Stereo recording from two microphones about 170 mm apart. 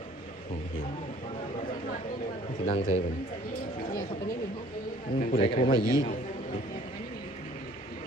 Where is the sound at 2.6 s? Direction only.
50° left (ahead or behind).